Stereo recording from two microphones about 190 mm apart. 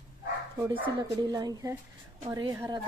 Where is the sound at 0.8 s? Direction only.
25° right (ahead or behind).